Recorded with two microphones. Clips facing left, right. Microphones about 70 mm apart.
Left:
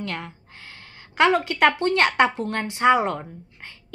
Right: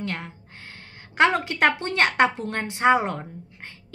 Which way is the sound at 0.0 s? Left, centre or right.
Right.